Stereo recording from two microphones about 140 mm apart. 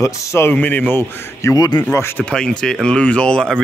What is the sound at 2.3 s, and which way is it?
Speech, 5° left (ahead or behind).